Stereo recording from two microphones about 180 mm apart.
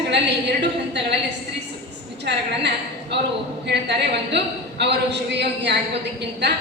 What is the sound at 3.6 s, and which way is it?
A woman's voice, 70° right (ahead or behind).